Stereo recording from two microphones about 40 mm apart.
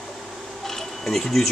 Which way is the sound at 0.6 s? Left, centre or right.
Centre.